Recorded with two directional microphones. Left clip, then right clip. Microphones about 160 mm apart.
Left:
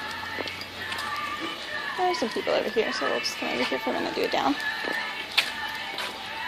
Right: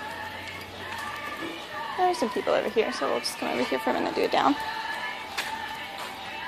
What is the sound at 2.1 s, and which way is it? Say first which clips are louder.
Speech: even; 10° right (ahead or behind).